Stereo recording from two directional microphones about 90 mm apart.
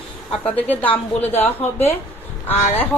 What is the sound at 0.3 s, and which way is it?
A woman's voice, 15° left (ahead or behind).